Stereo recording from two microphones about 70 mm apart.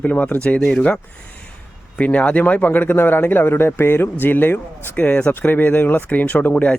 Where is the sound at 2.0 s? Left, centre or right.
Centre.